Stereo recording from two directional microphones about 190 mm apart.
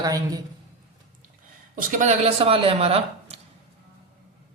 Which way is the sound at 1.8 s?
45° right (ahead or behind).